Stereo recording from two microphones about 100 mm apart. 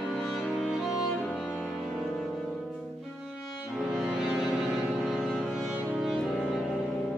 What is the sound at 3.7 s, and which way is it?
Music, 5° right (ahead or behind).